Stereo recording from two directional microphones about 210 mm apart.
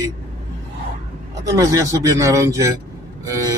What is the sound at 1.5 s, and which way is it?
Speech, 15° right (ahead or behind).